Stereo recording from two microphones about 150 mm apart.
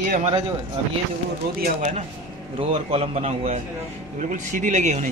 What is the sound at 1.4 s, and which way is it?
Speech, 90° right.